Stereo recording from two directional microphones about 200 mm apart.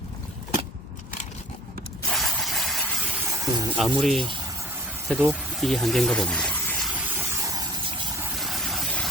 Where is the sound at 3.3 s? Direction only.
15° right (ahead or behind); by 4.2 s centre (ahead or behind).